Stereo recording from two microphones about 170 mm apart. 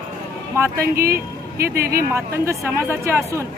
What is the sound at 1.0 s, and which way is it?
Speech, 15° right (ahead or behind).